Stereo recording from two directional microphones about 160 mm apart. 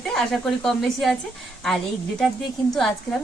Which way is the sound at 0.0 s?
Centre (ahead or behind).